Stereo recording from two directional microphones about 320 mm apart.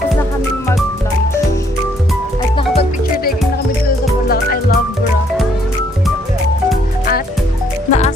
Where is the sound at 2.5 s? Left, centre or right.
Centre.